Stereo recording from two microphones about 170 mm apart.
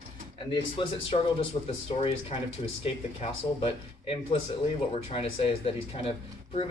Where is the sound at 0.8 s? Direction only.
30° left (ahead or behind).